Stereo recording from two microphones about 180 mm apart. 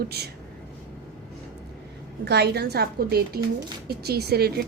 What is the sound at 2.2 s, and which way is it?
A woman's voice, 65° right (ahead or behind).